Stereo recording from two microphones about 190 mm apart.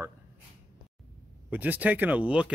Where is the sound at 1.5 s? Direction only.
10° right (ahead or behind).